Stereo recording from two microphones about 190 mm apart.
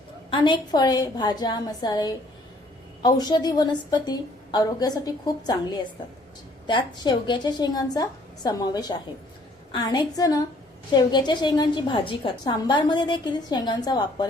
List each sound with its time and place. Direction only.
0.3 s a woman's voice: 25° left (ahead or behind)